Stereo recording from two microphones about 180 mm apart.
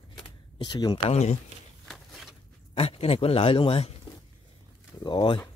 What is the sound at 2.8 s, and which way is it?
Speech, 30° left (ahead or behind).